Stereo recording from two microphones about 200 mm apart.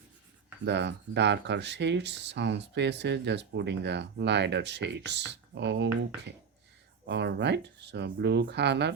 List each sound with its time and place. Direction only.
0.6 s speech: 60° right (ahead or behind)
7.1 s speech: 60° right (ahead or behind)